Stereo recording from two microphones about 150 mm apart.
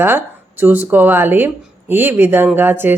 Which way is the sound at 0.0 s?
15° right (ahead or behind).